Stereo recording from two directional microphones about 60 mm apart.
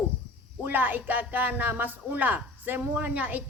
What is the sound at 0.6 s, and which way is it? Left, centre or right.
Speech, right.